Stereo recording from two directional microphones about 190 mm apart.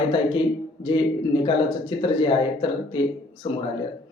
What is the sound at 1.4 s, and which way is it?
A man's voice, 25° left (ahead or behind).